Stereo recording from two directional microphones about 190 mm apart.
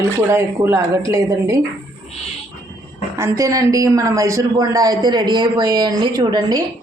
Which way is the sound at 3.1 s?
15° right (ahead or behind).